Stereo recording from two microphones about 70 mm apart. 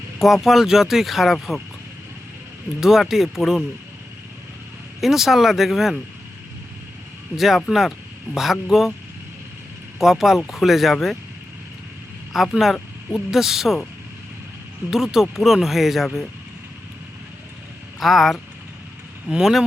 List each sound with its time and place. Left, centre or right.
0.2 s speech: centre
2.8 s speech: centre
4.9 s speech: centre
7.3 s speech: centre
10.0 s speech: centre
12.3 s speech: centre
14.8 s speech: centre
18.0 s speech: centre